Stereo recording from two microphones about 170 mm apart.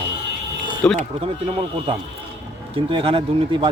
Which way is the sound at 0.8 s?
5° left (ahead or behind).